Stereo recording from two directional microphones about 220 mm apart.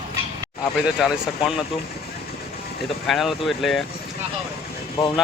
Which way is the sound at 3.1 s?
Centre (ahead or behind).